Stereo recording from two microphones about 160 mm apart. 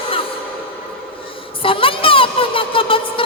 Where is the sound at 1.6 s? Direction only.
35° left (ahead or behind).